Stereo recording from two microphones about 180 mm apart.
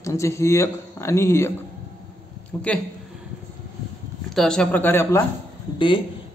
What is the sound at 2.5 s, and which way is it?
Speech, 5° left (ahead or behind).